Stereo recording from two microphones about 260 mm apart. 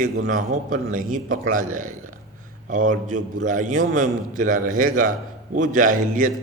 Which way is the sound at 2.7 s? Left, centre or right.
Right.